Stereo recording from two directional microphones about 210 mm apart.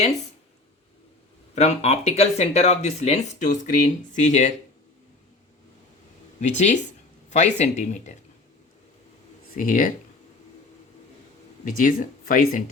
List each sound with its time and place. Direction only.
1.5 s speech: 30° left (ahead or behind)
6.4 s speech: 35° left (ahead or behind)
9.6 s speech: 40° left (ahead or behind)
11.6 s speech: 40° left (ahead or behind)